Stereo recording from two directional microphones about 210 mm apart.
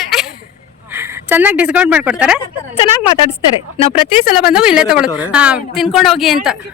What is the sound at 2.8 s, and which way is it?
Speech, 25° left (ahead or behind).